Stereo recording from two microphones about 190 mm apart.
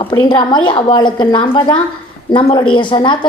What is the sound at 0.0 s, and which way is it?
A woman's voice, 25° left (ahead or behind).